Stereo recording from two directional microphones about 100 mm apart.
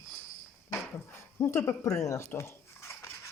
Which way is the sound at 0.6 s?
25° left (ahead or behind).